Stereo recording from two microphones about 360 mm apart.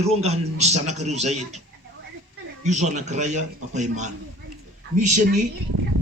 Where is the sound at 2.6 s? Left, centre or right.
Centre.